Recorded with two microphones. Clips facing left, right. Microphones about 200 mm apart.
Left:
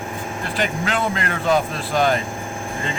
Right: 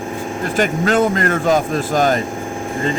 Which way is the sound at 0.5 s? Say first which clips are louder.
Right 8 dB; 45° right (ahead or behind).